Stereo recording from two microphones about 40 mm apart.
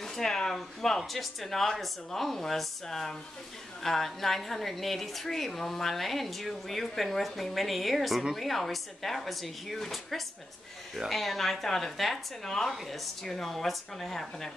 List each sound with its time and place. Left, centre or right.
0.0 s a woman's voice: centre